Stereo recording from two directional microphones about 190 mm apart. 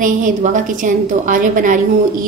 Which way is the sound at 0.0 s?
40° right (ahead or behind).